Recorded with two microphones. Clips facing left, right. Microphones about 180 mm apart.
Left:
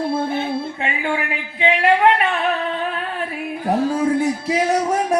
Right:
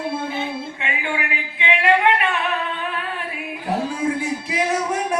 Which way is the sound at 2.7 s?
40° left (ahead or behind).